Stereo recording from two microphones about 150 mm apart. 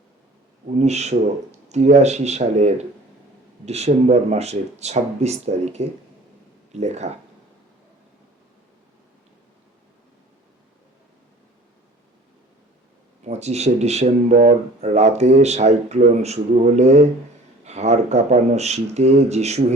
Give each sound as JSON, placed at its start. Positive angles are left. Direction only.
{"t": 0.8, "sound": "speech", "side_deg": -50}
{"t": 13.2, "sound": "speech", "side_deg": -45}
{"t": 14.3, "sound": "speech", "side_deg": -65}
{"t": 14.8, "sound": "speech", "side_deg": -50}